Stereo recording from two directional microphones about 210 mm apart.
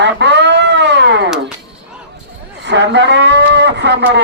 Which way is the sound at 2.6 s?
55° right (ahead or behind).